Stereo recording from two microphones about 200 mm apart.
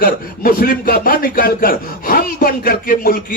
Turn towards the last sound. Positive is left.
turn(degrees=45)  # may be behind; listen again after turning